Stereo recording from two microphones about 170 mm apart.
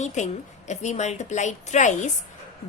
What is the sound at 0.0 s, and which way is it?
A woman's voice, 45° left (ahead or behind).